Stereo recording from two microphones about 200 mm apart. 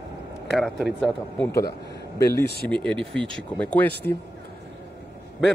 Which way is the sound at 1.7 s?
55° left (ahead or behind).